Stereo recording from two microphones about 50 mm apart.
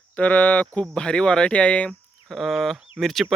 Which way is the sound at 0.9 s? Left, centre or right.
Centre.